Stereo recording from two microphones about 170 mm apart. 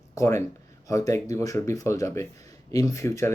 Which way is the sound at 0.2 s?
15° left (ahead or behind).